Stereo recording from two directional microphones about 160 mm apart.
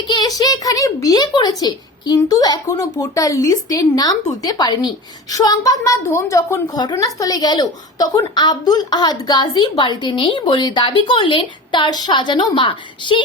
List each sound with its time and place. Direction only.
0.1 s a woman's voice: 25° left (ahead or behind)